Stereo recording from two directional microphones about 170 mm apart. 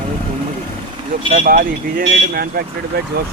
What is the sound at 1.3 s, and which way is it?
Speech, 55° right (ahead or behind).